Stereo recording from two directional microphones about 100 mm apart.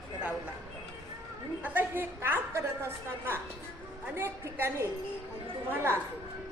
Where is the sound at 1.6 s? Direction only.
20° right (ahead or behind).